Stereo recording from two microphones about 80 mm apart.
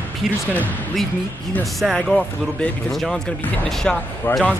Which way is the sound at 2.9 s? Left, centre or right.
Centre.